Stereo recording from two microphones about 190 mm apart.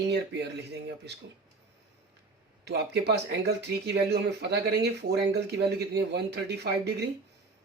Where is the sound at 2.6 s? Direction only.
60° right (ahead or behind).